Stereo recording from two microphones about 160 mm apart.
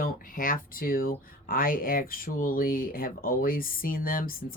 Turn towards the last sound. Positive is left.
turn(degrees=65)  # may be behind; listen again after turning